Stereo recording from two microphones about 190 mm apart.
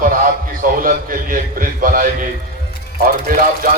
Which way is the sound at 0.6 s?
45° right (ahead or behind).